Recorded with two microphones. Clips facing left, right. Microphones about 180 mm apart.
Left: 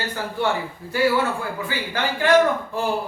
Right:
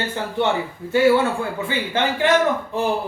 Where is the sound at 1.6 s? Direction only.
25° right (ahead or behind).